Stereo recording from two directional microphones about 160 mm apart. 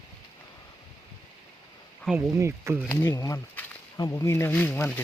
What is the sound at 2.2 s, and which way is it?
Speech, 15° right (ahead or behind).